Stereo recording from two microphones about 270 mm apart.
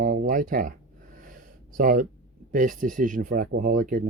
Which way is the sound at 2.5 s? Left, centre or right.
Right.